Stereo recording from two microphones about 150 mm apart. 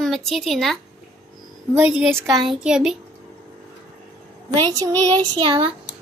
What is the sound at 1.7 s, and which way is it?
A child's voice, 10° right (ahead or behind).